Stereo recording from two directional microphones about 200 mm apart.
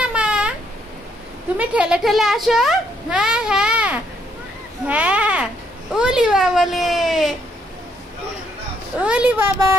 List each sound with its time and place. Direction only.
0.0 s a sound: 5° right (ahead or behind)
1.6 s a woman's voice: 5° right (ahead or behind)
9.0 s speech: 5° right (ahead or behind)